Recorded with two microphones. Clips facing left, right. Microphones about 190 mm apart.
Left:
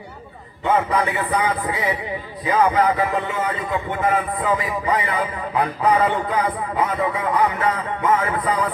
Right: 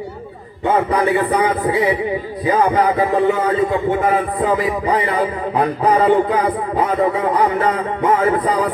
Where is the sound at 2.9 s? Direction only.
35° right (ahead or behind).